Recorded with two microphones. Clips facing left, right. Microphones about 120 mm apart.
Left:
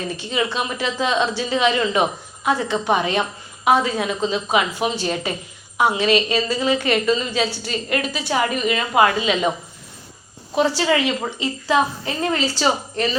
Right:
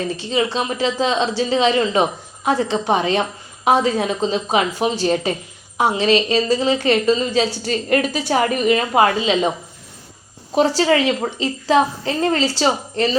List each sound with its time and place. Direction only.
0.2 s a woman's voice: 30° right (ahead or behind)
10.5 s a woman's voice: 35° right (ahead or behind)